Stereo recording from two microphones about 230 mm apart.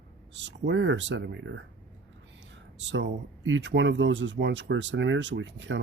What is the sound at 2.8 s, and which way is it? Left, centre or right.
Speech, right.